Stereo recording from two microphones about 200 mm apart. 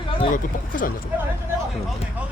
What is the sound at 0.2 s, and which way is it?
Speech, 40° left (ahead or behind).